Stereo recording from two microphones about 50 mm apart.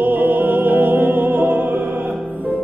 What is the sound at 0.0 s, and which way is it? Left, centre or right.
Music, right.